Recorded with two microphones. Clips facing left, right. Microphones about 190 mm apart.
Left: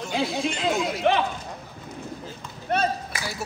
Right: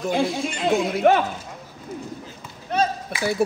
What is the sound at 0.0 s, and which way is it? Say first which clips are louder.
Speech: right 3 dB; 55° right (ahead or behind).